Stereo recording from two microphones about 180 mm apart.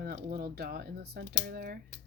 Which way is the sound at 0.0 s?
60° right (ahead or behind).